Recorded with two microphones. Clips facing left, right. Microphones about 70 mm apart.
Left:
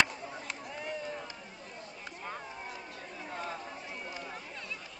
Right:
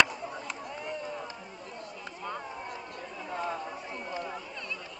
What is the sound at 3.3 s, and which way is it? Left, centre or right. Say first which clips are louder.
Chatter: right 6 dB; centre.